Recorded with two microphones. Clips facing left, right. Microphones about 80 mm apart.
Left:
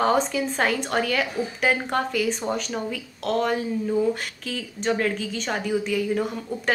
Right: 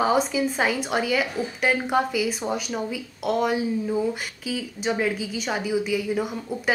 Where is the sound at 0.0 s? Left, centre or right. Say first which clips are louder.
Even; centre.